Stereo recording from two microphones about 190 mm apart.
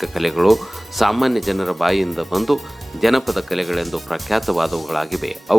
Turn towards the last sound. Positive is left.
turn(degrees=0)  # may be behind; listen again after turning